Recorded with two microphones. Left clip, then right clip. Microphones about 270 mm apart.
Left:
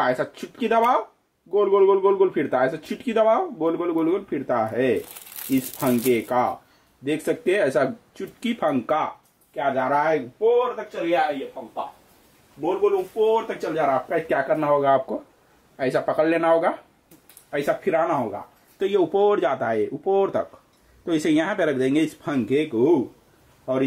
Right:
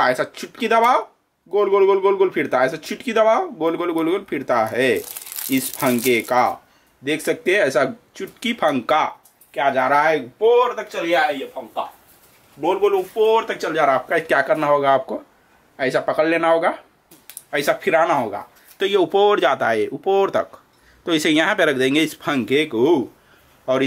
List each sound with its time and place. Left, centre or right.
0.0 s speech: centre
12.6 s speech: centre